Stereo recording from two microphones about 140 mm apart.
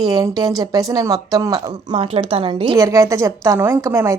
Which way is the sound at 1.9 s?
45° right (ahead or behind).